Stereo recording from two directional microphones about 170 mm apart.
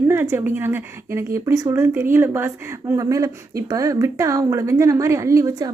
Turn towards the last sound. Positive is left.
turn(degrees=-20)  # may be behind; listen again after turning